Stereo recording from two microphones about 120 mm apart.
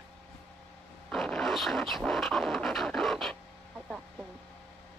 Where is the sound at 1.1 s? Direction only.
5° left (ahead or behind).